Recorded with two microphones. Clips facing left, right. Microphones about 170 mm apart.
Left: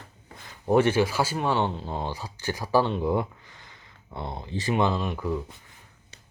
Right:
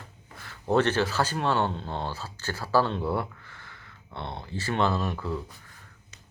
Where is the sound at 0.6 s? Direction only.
10° left (ahead or behind).